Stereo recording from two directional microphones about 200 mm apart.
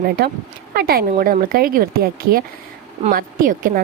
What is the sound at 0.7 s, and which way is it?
A woman's voice, 50° right (ahead or behind).